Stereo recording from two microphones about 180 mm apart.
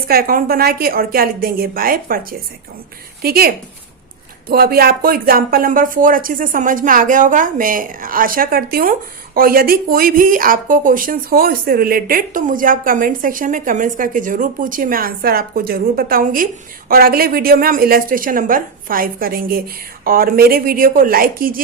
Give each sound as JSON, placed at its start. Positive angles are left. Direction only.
{"t": 0.1, "sound": "a woman's voice", "side_deg": -55}